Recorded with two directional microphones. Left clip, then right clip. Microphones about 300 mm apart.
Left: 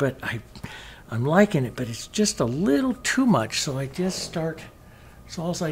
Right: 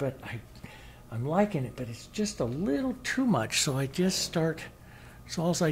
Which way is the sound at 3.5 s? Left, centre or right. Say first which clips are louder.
Left 2 dB; right.